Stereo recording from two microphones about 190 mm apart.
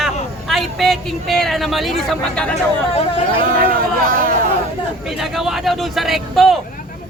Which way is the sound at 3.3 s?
50° right (ahead or behind).